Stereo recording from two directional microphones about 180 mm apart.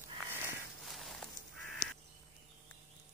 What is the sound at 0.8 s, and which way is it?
Walk, centre (ahead or behind).